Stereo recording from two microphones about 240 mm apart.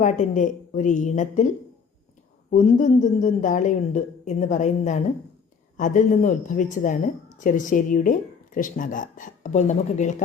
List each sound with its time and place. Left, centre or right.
0.0 s a woman's voice: left